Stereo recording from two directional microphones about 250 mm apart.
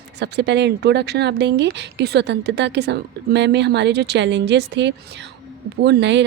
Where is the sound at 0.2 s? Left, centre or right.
Right.